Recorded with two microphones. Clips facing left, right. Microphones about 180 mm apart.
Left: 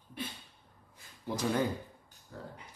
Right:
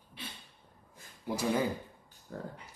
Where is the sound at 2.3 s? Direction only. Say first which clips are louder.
Right 4 dB; 50° right (ahead or behind).